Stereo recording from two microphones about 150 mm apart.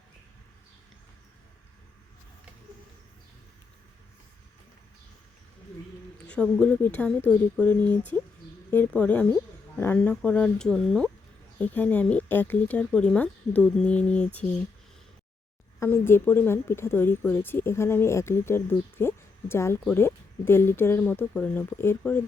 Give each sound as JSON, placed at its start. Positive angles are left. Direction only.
{"t": 6.2, "sound": "speech", "side_deg": 5}
{"t": 9.0, "sound": "speech", "side_deg": 10}
{"t": 15.8, "sound": "speech", "side_deg": 15}